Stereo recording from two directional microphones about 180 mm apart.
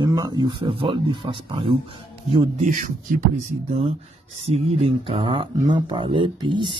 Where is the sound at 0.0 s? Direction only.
20° right (ahead or behind).